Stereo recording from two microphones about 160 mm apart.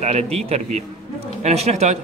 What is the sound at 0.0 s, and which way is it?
A man's voice, 45° right (ahead or behind).